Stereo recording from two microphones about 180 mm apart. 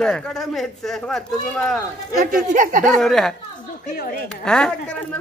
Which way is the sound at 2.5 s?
50° right (ahead or behind).